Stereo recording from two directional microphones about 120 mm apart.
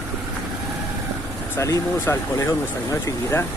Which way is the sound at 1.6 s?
25° left (ahead or behind).